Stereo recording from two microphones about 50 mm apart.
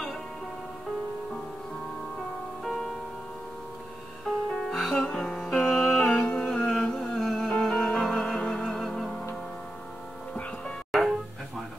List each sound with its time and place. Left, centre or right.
2.6 s music: centre
4.6 s music: centre
5.0 s music: centre
6.3 s mantra: centre
6.6 s music: centre
8.6 s music: centre
10.9 s music: centre